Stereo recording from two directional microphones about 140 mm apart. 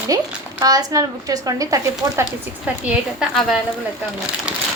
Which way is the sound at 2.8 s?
Centre (ahead or behind).